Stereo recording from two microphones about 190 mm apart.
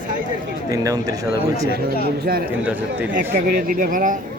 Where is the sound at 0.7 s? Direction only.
20° right (ahead or behind).